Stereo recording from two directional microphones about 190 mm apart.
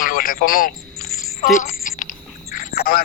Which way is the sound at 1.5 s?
45° left (ahead or behind).